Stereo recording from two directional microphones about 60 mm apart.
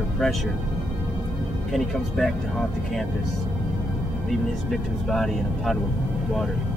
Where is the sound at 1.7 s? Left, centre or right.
Centre.